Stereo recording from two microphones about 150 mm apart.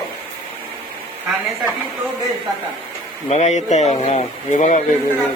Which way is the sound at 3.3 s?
50° left (ahead or behind).